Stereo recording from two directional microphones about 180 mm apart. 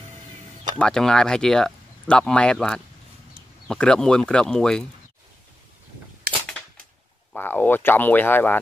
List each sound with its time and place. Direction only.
0.7 s speech: 5° left (ahead or behind)
6.3 s a sound: 55° right (ahead or behind)
7.3 s speech: 10° left (ahead or behind)